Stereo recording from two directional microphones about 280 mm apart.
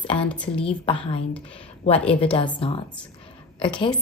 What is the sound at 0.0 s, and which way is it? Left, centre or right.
Speech, centre.